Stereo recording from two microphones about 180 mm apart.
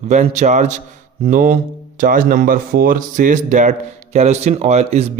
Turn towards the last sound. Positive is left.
turn(degrees=-40)  # may be behind; listen again after turning